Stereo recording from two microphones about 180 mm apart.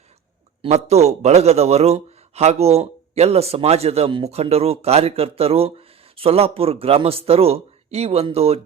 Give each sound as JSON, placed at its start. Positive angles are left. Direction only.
{"t": 0.6, "sound": "a man's voice", "side_deg": -35}